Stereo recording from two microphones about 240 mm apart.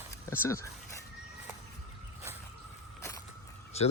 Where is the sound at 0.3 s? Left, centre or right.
Centre.